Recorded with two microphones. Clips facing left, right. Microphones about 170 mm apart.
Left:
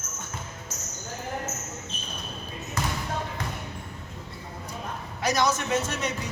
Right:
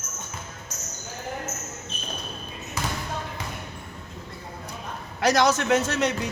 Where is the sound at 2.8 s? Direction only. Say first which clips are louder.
Even; 5° right (ahead or behind).